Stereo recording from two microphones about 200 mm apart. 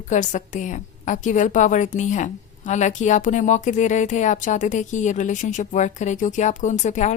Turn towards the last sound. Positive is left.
turn(degrees=35)  # may be behind; listen again after turning